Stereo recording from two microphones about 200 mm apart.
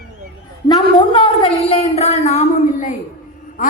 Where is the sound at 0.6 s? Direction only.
25° left (ahead or behind).